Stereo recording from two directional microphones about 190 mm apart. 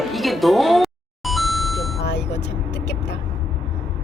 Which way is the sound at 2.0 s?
65° left (ahead or behind).